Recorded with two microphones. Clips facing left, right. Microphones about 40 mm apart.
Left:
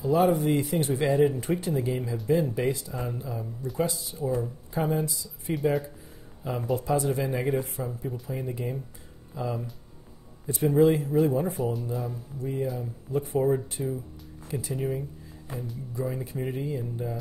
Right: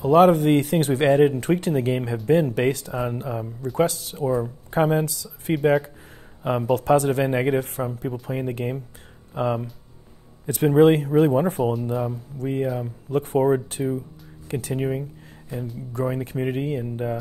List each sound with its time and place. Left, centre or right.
0.0 s a man's voice: right
3.7 s speech: right
4.2 s a man's voice: right
5.6 s a man's voice: right
12.7 s a man's voice: right
13.8 s speech: right
14.5 s speech: right
15.9 s speech: right